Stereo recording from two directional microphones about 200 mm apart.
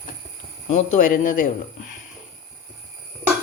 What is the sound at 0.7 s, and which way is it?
Speech, 35° left (ahead or behind).